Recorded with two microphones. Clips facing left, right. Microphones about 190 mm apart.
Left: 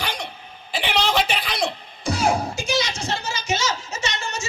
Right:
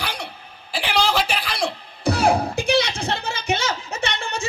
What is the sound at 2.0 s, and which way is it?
Music, 60° right (ahead or behind).